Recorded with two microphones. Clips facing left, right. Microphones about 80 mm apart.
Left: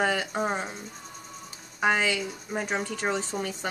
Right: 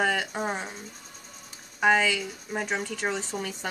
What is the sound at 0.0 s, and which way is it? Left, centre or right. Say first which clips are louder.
Speech: even; centre.